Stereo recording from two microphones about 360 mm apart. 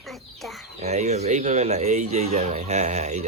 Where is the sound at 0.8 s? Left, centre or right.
Centre.